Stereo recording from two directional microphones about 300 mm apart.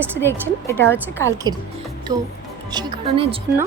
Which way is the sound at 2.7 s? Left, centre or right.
Centre.